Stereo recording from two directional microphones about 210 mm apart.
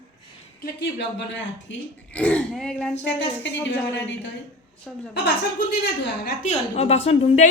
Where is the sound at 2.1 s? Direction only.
5° left (ahead or behind).